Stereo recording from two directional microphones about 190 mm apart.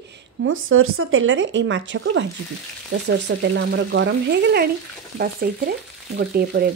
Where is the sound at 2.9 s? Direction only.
70° right (ahead or behind).